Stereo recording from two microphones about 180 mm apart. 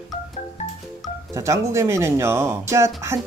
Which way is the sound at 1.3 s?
15° right (ahead or behind).